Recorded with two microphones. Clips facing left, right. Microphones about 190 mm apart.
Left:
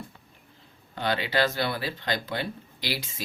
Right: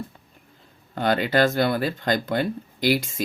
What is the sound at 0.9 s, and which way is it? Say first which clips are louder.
Speech: right 6 dB; 50° right (ahead or behind).